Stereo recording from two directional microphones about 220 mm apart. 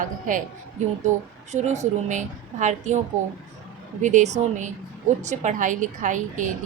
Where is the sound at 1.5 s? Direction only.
30° right (ahead or behind).